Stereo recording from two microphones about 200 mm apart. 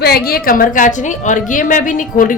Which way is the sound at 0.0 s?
50° left (ahead or behind).